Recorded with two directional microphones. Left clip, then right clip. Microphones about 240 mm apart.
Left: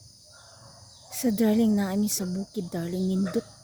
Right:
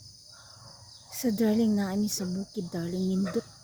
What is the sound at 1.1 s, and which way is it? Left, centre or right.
Speech, centre.